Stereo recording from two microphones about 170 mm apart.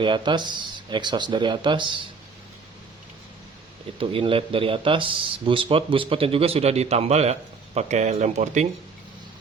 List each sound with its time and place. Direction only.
0.0 s speech: 25° right (ahead or behind)
4.0 s speech: 30° right (ahead or behind)